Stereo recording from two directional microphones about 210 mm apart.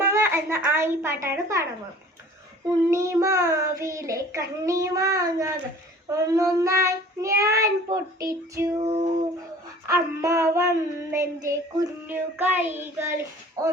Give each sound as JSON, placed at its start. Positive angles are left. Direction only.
{"t": 0.1, "sound": "a child's voice", "side_deg": -10}
{"t": 2.6, "sound": "a child's voice", "side_deg": -15}
{"t": 8.8, "sound": "music", "side_deg": -30}
{"t": 9.8, "sound": "a child's voice", "side_deg": -15}